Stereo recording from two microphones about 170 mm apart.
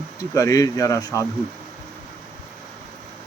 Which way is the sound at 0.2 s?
20° left (ahead or behind).